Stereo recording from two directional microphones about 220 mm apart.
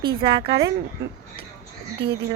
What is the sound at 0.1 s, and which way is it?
Speech, 20° right (ahead or behind).